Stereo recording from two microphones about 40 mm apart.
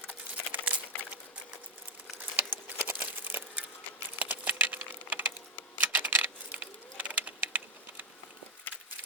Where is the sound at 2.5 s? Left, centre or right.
Right.